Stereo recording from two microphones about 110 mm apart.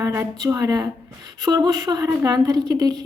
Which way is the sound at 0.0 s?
25° right (ahead or behind).